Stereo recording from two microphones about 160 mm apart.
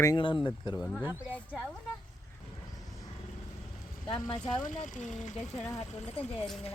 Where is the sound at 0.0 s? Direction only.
25° left (ahead or behind).